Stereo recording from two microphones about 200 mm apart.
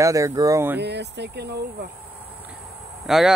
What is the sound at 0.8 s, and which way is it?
Speech, 60° right (ahead or behind).